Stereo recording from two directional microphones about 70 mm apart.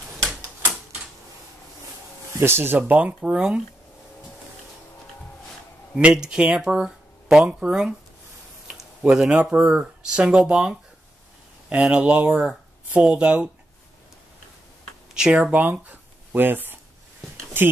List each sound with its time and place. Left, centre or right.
2.3 s speech: right
2.9 s speech: right
5.9 s speech: centre
15.1 s speech: centre
15.5 s speech: right